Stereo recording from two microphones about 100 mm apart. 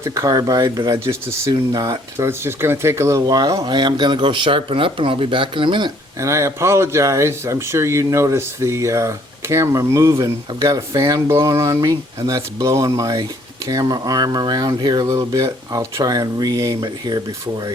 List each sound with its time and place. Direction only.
0.0 s speech: 35° right (ahead or behind)
0.9 s speech: 30° right (ahead or behind)
2.1 s speech: 25° right (ahead or behind); by 5.9 s 55° right (ahead or behind)
6.1 s speech: 30° right (ahead or behind)